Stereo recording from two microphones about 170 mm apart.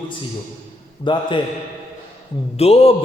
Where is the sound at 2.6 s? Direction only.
35° left (ahead or behind).